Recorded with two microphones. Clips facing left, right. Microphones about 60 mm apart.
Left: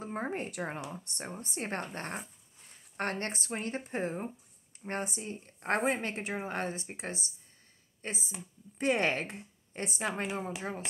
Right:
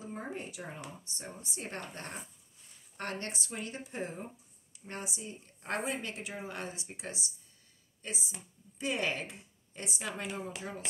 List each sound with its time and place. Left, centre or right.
0.0 s speech: left